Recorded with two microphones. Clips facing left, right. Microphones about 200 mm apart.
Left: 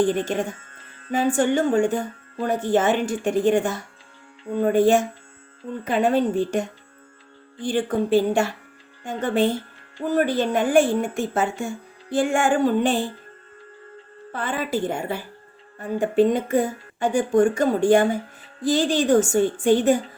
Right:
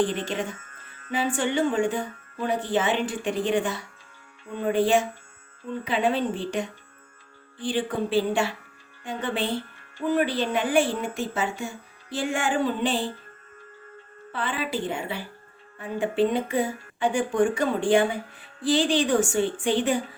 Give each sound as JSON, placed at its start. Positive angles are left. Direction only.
{"t": 0.0, "sound": "speech", "side_deg": 45}
{"t": 0.5, "sound": "music", "side_deg": 30}
{"t": 1.4, "sound": "speech", "side_deg": 45}
{"t": 14.3, "sound": "speech", "side_deg": 45}